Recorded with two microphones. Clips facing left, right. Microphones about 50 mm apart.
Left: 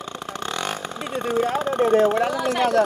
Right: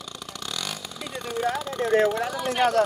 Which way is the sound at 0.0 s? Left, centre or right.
Left.